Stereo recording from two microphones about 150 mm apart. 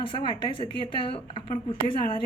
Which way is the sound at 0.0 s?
35° left (ahead or behind).